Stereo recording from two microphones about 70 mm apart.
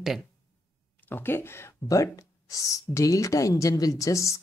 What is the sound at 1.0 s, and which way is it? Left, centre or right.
Speech, left.